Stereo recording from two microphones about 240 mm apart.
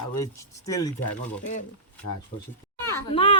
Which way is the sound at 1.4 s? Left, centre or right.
Left.